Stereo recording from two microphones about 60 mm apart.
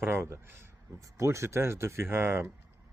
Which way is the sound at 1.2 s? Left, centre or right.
Right.